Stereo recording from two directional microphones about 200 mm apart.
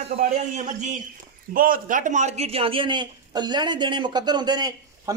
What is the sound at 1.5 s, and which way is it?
A man's voice, 45° right (ahead or behind).